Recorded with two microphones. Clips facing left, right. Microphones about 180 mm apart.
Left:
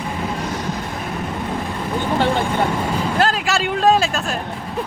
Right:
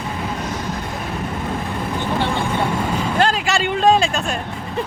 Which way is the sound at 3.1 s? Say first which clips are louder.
Right 1 dB; centre (ahead or behind).